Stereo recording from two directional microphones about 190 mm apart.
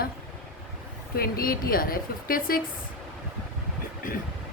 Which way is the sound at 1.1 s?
55° left (ahead or behind).